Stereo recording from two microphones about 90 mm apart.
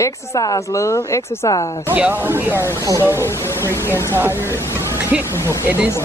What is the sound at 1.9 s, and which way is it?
Speech, 20° right (ahead or behind).